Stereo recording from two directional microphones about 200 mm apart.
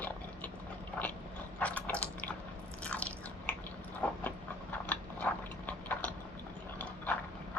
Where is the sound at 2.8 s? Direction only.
5° left (ahead or behind).